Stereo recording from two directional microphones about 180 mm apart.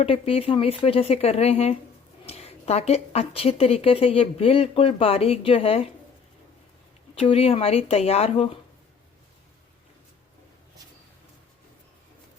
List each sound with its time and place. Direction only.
0.0 s a woman's voice: 30° left (ahead or behind)
7.2 s a woman's voice: 35° left (ahead or behind)